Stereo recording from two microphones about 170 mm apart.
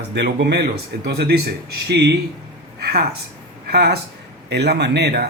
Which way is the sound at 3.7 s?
70° right (ahead or behind).